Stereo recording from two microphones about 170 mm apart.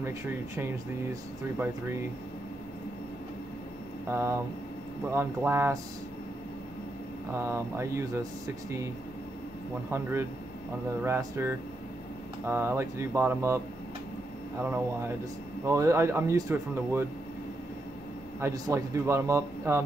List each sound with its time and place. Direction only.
4.1 s speech: 15° right (ahead or behind)
7.3 s speech: 15° right (ahead or behind)
9.8 s speech: 15° right (ahead or behind)
15.6 s speech: 20° right (ahead or behind)
18.4 s speech: 15° right (ahead or behind)